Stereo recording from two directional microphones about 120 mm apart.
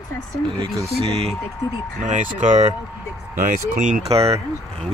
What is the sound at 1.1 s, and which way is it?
Speech, 55° right (ahead or behind).